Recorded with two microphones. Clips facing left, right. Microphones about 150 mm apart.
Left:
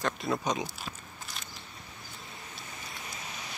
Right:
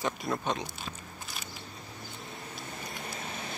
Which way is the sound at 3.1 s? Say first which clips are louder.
Right 4 dB; 55° right (ahead or behind).